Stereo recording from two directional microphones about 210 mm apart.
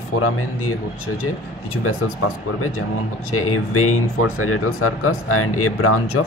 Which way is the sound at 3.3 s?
90° left.